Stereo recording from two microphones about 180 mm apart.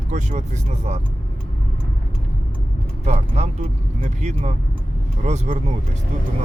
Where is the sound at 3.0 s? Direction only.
40° right (ahead or behind).